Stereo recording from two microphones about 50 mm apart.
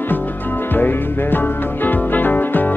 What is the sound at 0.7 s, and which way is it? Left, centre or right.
Music, left.